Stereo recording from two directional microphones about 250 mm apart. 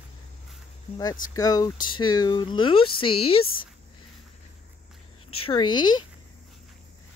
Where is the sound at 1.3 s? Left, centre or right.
Centre.